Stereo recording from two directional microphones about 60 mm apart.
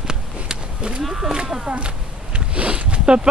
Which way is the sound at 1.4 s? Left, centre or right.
Centre.